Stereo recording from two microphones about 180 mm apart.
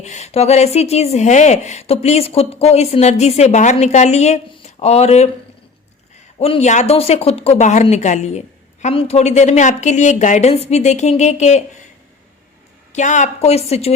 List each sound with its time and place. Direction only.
0.0 s speech: 40° left (ahead or behind)
6.4 s speech: 35° left (ahead or behind)
12.9 s speech: 40° left (ahead or behind)